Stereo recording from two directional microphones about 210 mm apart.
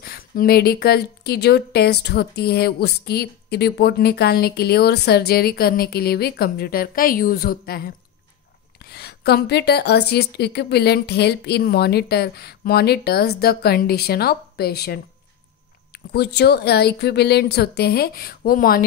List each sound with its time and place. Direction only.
0.0 s a woman's voice: 45° left (ahead or behind)